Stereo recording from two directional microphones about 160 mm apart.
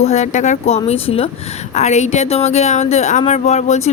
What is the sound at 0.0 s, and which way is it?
Speech, 45° left (ahead or behind).